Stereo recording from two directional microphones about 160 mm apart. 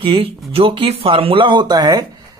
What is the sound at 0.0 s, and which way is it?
Speech, 35° right (ahead or behind).